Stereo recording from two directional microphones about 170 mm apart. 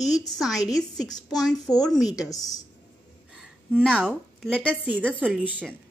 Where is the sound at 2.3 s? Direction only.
20° left (ahead or behind).